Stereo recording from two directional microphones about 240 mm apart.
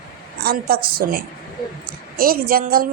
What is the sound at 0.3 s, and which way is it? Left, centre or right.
A woman's voice, right.